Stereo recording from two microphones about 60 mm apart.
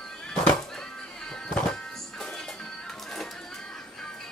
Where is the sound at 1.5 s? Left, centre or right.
Centre.